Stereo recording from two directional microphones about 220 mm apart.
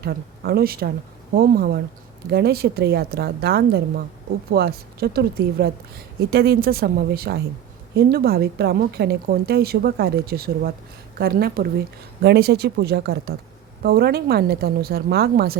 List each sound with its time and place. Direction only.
0.0 s a woman's voice: 45° right (ahead or behind)